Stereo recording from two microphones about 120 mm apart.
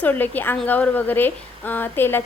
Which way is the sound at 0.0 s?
15° left (ahead or behind).